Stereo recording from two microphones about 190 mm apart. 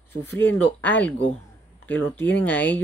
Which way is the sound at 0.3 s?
10° left (ahead or behind).